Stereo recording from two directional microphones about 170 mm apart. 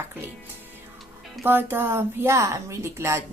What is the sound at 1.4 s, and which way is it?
A woman's voice, 10° right (ahead or behind).